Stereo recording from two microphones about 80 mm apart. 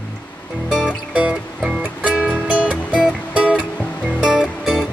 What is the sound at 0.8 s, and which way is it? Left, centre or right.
Music, centre.